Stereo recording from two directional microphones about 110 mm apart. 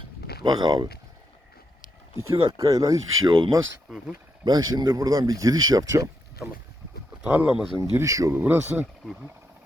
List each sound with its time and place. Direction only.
0.4 s speech: 40° right (ahead or behind)
2.1 s speech: 30° right (ahead or behind)
4.4 s speech: 40° right (ahead or behind)
7.2 s speech: 10° right (ahead or behind)
7.9 s speech: 30° right (ahead or behind)
8.4 s speech: 15° right (ahead or behind)